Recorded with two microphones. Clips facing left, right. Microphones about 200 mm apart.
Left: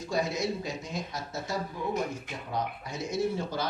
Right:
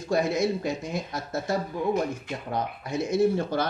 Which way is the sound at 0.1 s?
55° right (ahead or behind).